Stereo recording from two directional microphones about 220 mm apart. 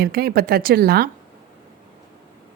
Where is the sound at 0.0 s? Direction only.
45° right (ahead or behind).